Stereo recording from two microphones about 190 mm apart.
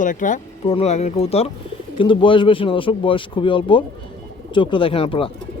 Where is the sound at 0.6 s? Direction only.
30° left (ahead or behind).